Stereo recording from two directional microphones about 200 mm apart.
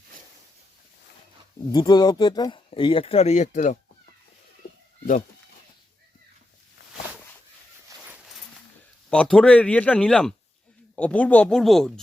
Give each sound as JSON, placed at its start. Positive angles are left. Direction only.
{"t": 1.7, "sound": "speech", "side_deg": 25}
{"t": 9.0, "sound": "speech", "side_deg": 5}